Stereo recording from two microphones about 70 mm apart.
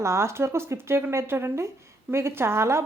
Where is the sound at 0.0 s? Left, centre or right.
Right.